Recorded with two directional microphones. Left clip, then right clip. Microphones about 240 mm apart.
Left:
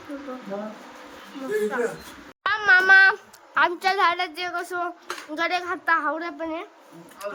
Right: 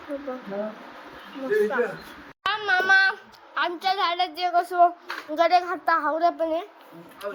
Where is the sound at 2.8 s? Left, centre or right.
Centre.